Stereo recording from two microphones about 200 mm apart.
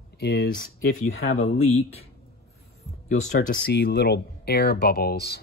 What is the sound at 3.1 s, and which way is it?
Speech, 40° left (ahead or behind).